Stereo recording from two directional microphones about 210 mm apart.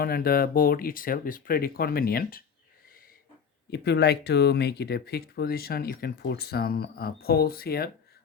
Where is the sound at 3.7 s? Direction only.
50° left (ahead or behind).